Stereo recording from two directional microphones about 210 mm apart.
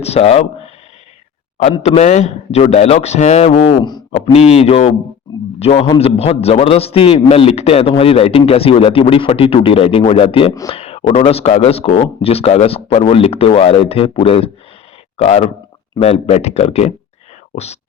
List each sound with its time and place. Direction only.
0.0 s a man's voice: 30° left (ahead or behind)